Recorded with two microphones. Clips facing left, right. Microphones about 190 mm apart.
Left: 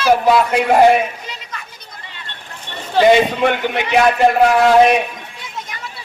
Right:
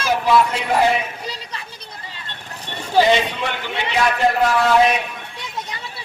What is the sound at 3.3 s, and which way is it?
Speech, 55° left (ahead or behind).